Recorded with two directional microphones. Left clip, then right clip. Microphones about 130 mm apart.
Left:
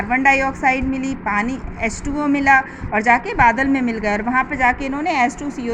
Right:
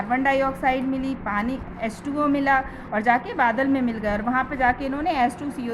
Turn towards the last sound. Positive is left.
turn(degrees=15)  # may be behind; listen again after turning